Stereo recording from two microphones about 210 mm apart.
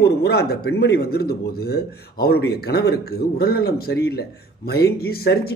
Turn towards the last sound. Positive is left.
turn(degrees=45)  # may be behind; listen again after turning